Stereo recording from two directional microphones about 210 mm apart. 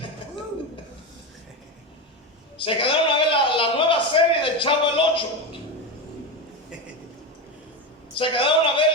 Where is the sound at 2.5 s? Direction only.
25° left (ahead or behind).